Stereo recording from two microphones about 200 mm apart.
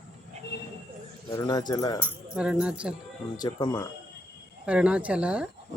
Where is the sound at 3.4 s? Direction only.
20° left (ahead or behind).